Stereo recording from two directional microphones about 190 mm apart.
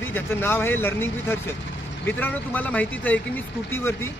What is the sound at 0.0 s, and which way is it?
A man's voice, 10° left (ahead or behind).